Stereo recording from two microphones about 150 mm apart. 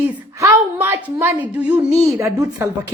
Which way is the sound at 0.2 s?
25° right (ahead or behind).